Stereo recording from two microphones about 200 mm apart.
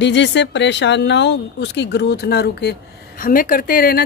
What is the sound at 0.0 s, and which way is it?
Speech, 60° left (ahead or behind).